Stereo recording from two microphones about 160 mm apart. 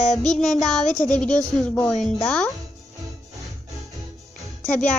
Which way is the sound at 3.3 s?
Centre (ahead or behind).